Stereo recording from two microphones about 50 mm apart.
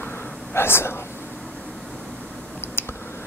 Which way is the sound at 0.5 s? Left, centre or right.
Left.